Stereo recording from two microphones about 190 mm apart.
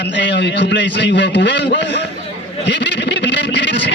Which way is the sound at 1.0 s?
65° left (ahead or behind).